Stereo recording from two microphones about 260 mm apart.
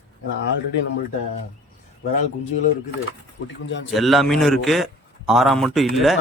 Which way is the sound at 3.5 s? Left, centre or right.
Left.